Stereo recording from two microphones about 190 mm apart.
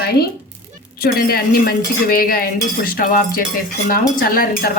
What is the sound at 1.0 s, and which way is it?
Dishes, 50° left (ahead or behind).